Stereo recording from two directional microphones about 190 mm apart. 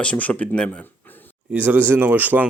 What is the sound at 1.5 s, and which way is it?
Speech, 10° right (ahead or behind).